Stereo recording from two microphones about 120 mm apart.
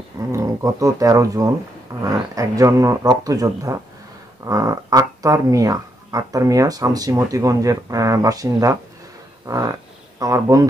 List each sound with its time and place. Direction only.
0.3 s speech: 25° right (ahead or behind)